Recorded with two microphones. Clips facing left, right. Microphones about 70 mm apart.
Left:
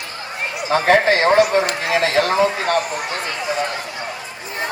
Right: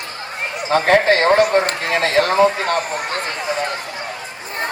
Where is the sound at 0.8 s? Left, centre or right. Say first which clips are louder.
Even; right.